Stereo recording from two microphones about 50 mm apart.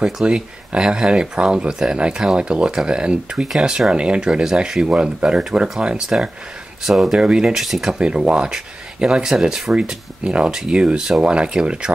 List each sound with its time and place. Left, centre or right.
0.0 s speech: centre
8.0 s speech: centre